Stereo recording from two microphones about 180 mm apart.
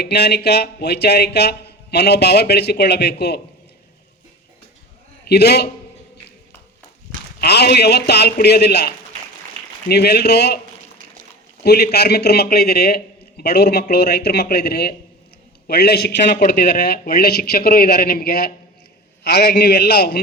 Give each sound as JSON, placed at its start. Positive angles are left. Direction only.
{"t": 0.0, "sound": "speech", "side_deg": 65}
{"t": 5.3, "sound": "speech", "side_deg": 65}
{"t": 7.4, "sound": "speech", "side_deg": 65}
{"t": 9.9, "sound": "speech", "side_deg": 65}
{"t": 11.6, "sound": "speech", "side_deg": 60}